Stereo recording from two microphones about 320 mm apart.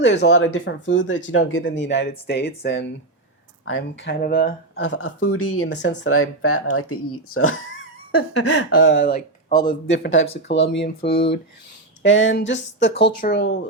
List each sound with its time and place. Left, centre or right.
0.0 s speech: left
9.5 s speech: centre
9.9 s speech: left
12.9 s speech: centre
13.2 s speech: left